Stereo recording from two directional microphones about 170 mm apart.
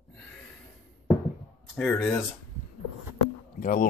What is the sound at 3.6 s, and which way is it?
Speech, 55° left (ahead or behind).